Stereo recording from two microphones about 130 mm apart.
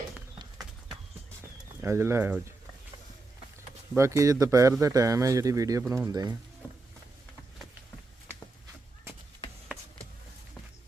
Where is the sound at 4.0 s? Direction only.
25° right (ahead or behind).